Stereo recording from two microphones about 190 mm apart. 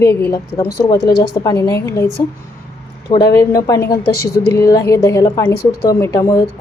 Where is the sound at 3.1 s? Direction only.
20° left (ahead or behind).